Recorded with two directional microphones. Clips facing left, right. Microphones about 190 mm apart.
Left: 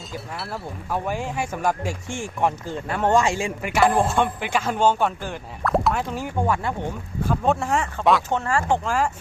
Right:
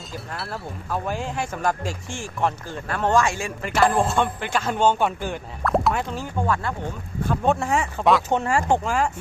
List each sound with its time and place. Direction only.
0.1 s speech: centre (ahead or behind)
0.9 s speech: 10° left (ahead or behind)
3.6 s speech: 10° left (ahead or behind)
6.1 s speech: 15° left (ahead or behind)
7.3 s speech: centre (ahead or behind)
8.3 s speech: 15° right (ahead or behind)
8.8 s speech: centre (ahead or behind)